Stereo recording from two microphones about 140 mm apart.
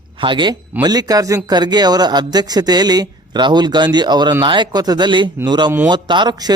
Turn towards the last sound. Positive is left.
turn(degrees=-30)  # may be behind; listen again after turning